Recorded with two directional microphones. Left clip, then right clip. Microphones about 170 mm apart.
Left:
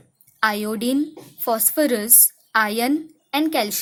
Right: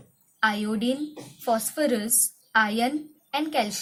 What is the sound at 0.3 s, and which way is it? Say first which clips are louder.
A woman's voice: left 4 dB; 45° left (ahead or behind).